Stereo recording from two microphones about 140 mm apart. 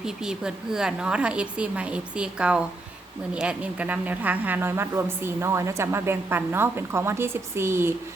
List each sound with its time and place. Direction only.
0.0 s a woman's voice: 5° right (ahead or behind)